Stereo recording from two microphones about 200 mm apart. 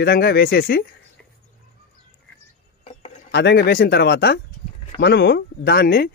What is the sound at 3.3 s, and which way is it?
Speech, 55° left (ahead or behind).